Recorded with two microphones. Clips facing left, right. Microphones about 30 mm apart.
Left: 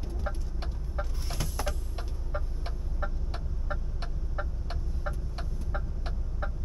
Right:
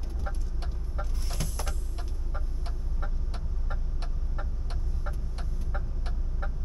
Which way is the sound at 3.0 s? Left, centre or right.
Centre.